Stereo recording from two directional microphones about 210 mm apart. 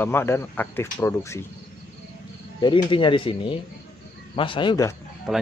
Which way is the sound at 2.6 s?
25° left (ahead or behind).